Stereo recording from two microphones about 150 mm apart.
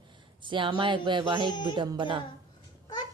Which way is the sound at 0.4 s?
35° right (ahead or behind).